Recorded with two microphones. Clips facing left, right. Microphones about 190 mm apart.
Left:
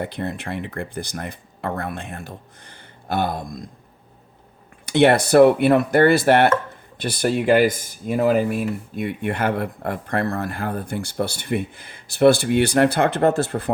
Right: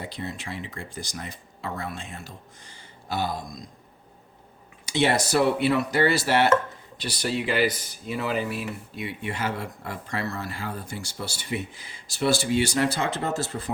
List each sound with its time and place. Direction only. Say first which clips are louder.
0.0 s speech: left 7 dB; 55° left (ahead or behind)
4.9 s speech: left 8 dB; 60° left (ahead or behind)